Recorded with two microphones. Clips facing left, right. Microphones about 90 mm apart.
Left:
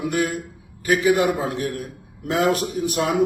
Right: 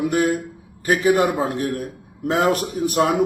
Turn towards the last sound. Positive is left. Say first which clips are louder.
# right 3 dB
turn(degrees=-40)  # may be behind; listen again after turning